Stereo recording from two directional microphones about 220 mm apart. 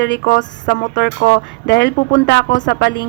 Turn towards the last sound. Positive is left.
turn(degrees=55)  # may be behind; listen again after turning